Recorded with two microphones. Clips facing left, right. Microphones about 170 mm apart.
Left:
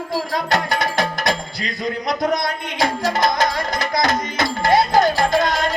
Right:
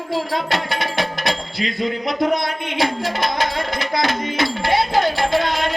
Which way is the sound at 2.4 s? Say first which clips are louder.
Even; 45° left (ahead or behind).